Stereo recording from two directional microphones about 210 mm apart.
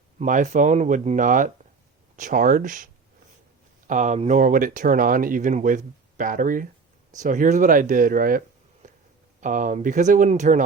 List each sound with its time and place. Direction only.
0.2 s speech: 35° right (ahead or behind)